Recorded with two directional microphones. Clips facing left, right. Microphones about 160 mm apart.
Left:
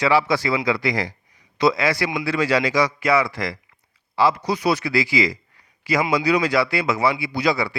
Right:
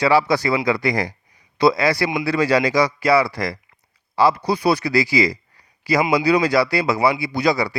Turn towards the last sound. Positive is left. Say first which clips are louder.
# right 2 dB
turn(degrees=-40)  # may be behind; listen again after turning